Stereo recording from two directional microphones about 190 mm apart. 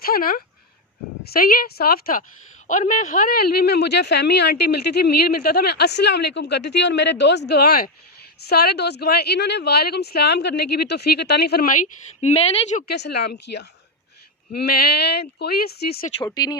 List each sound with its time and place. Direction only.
0.0 s a woman's voice: 50° left (ahead or behind)
12.9 s speech: 60° left (ahead or behind)
16.2 s speech: 20° left (ahead or behind)